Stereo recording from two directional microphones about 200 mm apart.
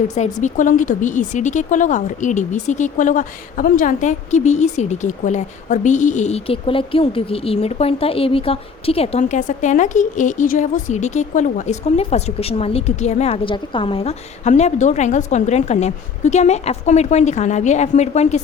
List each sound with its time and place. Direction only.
0.1 s speech: 35° left (ahead or behind)